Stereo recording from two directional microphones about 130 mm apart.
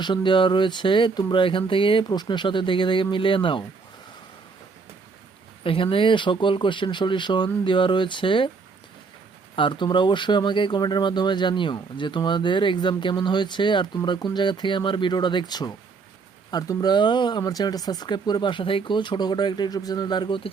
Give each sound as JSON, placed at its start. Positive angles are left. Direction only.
{"t": 0.0, "sound": "speech", "side_deg": 35}
{"t": 5.6, "sound": "speech", "side_deg": 45}
{"t": 9.6, "sound": "speech", "side_deg": 40}